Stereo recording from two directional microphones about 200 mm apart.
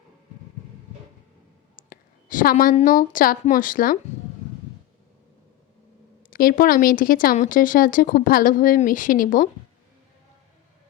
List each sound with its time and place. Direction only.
1.7 s a woman's voice: 45° left (ahead or behind)
6.3 s speech: 45° left (ahead or behind)